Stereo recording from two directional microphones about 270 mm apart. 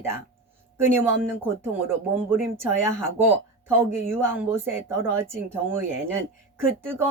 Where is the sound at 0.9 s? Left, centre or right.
Centre.